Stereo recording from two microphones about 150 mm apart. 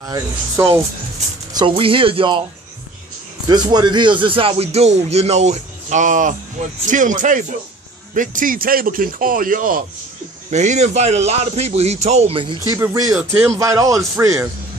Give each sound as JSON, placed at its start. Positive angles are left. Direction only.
{"t": 0.0, "sound": "speech", "side_deg": -20}
{"t": 1.6, "sound": "speech", "side_deg": -35}
{"t": 3.4, "sound": "a man's voice", "side_deg": -30}
{"t": 10.5, "sound": "speech", "side_deg": -50}
{"t": 12.6, "sound": "speech", "side_deg": -20}